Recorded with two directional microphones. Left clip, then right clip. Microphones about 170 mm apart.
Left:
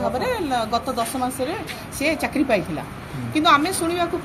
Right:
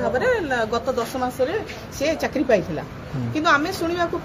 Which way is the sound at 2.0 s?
5° right (ahead or behind).